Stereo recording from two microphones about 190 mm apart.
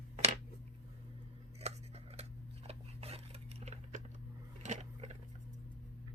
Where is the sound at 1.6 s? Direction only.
35° right (ahead or behind).